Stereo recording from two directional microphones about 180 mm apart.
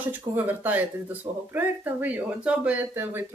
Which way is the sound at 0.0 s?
10° right (ahead or behind).